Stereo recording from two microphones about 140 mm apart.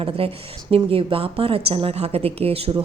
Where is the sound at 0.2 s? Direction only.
45° right (ahead or behind).